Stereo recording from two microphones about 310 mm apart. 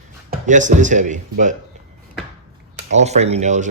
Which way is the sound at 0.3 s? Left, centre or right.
Right.